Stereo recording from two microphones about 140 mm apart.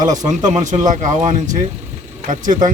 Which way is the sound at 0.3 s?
60° right (ahead or behind).